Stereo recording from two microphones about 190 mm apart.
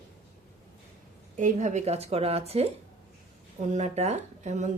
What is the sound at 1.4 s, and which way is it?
Speech, 40° right (ahead or behind).